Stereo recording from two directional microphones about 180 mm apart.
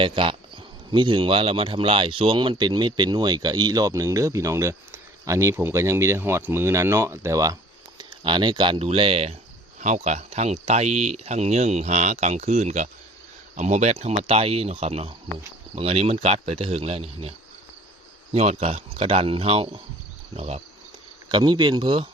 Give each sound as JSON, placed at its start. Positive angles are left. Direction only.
{"t": 0.0, "sound": "speech", "side_deg": -30}
{"t": 18.3, "sound": "speech", "side_deg": -35}